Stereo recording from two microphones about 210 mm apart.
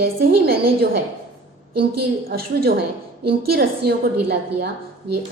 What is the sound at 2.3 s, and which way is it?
A woman's voice, 45° right (ahead or behind).